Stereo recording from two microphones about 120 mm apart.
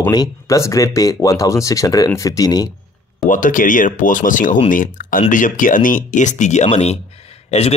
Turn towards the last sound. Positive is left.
turn(degrees=60)  # may be behind; listen again after turning